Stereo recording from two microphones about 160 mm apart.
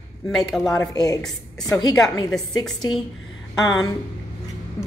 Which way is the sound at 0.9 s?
20° left (ahead or behind).